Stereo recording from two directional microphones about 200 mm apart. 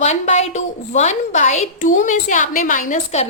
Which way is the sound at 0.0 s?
35° left (ahead or behind).